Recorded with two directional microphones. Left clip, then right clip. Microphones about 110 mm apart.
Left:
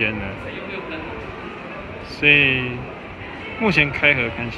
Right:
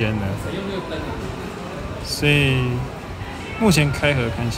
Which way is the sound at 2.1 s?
30° right (ahead or behind).